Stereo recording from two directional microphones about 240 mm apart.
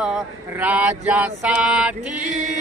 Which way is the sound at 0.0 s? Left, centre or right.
Centre.